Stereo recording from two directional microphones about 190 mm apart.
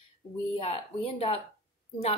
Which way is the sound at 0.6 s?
30° left (ahead or behind).